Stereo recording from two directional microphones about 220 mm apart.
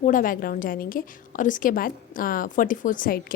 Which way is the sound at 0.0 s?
40° left (ahead or behind).